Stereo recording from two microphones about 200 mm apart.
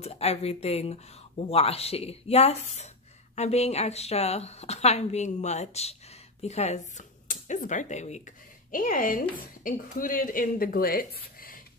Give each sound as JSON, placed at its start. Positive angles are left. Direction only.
{"t": 0.0, "sound": "speech", "side_deg": 30}